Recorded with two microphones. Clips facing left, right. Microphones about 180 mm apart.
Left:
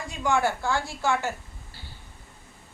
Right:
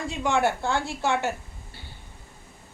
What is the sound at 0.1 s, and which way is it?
A woman's voice, 20° right (ahead or behind).